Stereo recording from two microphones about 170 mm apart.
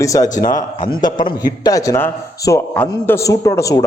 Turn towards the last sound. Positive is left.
turn(degrees=20)  # may be behind; listen again after turning